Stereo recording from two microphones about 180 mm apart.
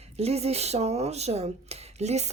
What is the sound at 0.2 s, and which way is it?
Speech, 35° right (ahead or behind).